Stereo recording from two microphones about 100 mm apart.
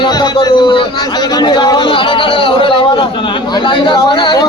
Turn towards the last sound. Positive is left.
turn(degrees=50)  # may be behind; listen again after turning